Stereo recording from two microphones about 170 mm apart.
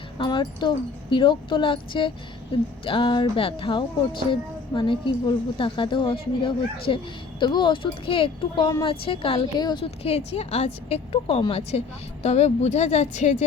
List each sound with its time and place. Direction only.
0.2 s speech: 25° left (ahead or behind); by 13.3 s 45° left (ahead or behind)